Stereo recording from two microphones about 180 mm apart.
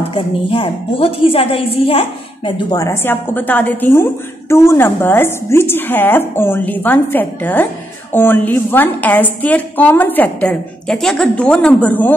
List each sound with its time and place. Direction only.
0.1 s a woman's voice: 30° left (ahead or behind)
2.7 s a woman's voice: 15° left (ahead or behind)